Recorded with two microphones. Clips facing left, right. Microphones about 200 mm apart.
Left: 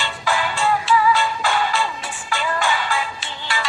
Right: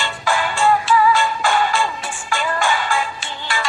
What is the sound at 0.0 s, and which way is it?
Music, 50° right (ahead or behind).